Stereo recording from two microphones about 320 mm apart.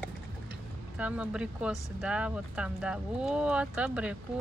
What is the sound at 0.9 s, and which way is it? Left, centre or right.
Speech, centre.